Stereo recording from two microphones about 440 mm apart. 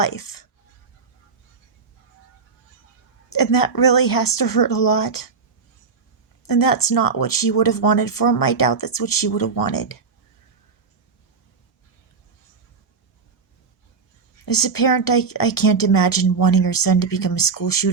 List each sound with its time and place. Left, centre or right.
0.0 s speech: left
3.3 s speech: left
6.4 s speech: left
14.4 s speech: left